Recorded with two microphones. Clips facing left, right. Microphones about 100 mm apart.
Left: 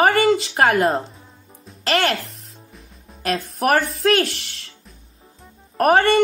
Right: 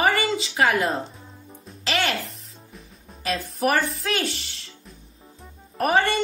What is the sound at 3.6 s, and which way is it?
Speech, 70° left (ahead or behind).